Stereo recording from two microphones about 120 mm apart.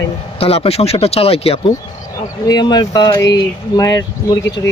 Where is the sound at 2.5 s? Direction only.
35° left (ahead or behind).